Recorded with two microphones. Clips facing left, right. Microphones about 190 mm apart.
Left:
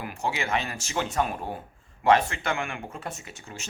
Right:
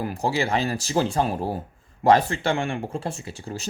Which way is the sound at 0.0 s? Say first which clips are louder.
Right 6 dB; 35° right (ahead or behind).